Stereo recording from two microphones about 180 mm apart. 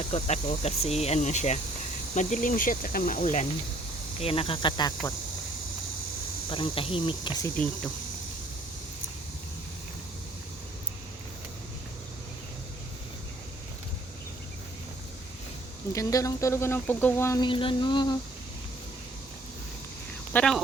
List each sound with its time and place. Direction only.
0.1 s speech: 35° left (ahead or behind)
4.2 s speech: 30° left (ahead or behind)
6.5 s speech: 30° left (ahead or behind)
7.4 s speech: 5° left (ahead or behind)
15.9 s speech: 20° left (ahead or behind)
20.3 s speech: 5° left (ahead or behind)